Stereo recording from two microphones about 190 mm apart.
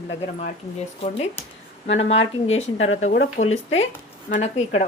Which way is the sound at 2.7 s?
90° left.